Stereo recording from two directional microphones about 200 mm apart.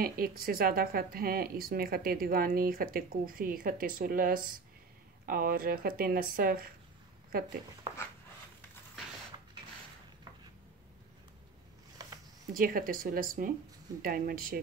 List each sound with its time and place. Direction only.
0.0 s speech: 45° right (ahead or behind)
12.0 s a sound: 20° right (ahead or behind)
12.5 s speech: 45° right (ahead or behind)